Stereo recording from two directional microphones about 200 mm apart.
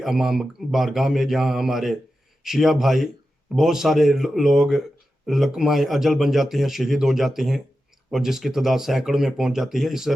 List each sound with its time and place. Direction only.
0.0 s speech: centre (ahead or behind)